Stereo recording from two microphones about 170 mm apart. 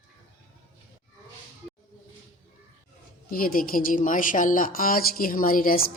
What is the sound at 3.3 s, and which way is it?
A woman's voice, 60° left (ahead or behind).